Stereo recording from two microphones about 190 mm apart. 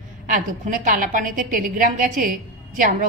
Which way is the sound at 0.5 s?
45° right (ahead or behind).